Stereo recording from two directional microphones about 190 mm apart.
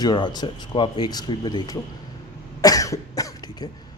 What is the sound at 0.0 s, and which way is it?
Speech, 25° left (ahead or behind).